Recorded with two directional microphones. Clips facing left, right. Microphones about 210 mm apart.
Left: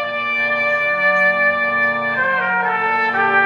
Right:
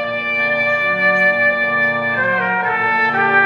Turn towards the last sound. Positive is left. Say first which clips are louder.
# right 1 dB
turn(degrees=-5)  # may be behind; listen again after turning